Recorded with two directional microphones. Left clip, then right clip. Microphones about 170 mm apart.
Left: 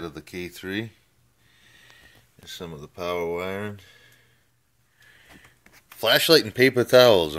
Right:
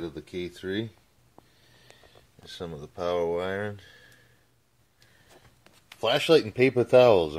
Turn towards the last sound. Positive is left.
turn(degrees=15)  # may be behind; listen again after turning